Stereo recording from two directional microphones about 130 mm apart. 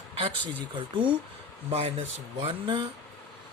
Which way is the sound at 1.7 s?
50° right (ahead or behind).